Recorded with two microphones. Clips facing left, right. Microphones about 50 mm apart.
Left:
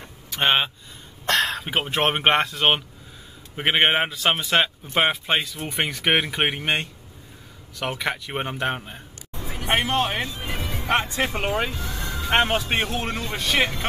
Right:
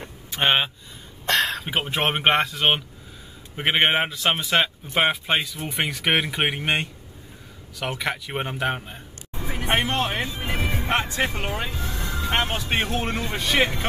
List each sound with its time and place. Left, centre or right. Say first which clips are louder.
0.4 s speech: even; centre
7.8 s speech: left 1 dB; centre
9.3 s vehicle: right 3 dB; centre
9.8 s speech: left 2 dB; centre
10.2 s music: right 3 dB; right
11.3 s speech: left 4 dB; centre
11.7 s music: even; centre
12.3 s speech: left 5 dB; left
12.6 s speech: even; centre